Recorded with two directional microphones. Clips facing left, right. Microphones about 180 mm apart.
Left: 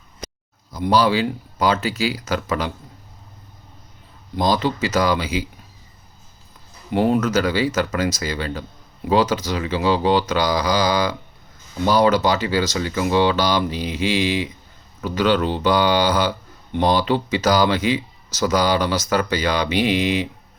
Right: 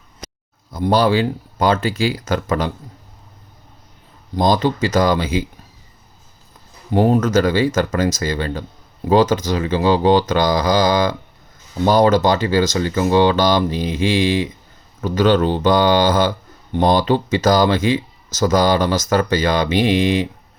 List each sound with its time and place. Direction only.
0.7 s speech: 50° right (ahead or behind)
4.4 s speech: 45° right (ahead or behind)
6.9 s speech: 45° right (ahead or behind)